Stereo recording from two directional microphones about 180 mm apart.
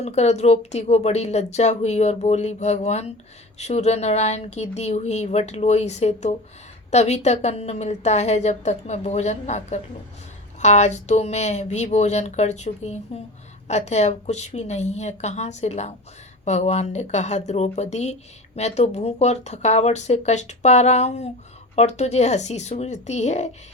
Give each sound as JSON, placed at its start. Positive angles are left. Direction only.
{"t": 0.0, "sound": "speech", "side_deg": 35}